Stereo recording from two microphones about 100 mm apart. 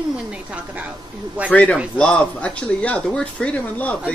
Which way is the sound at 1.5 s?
15° left (ahead or behind).